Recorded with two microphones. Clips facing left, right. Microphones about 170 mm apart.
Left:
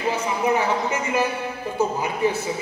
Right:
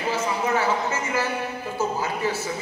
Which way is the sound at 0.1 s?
15° left (ahead or behind).